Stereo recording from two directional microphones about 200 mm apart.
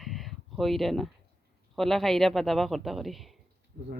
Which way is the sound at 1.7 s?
Centre (ahead or behind).